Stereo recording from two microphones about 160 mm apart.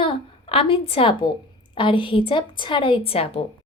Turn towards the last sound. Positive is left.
turn(degrees=35)  # may be behind; listen again after turning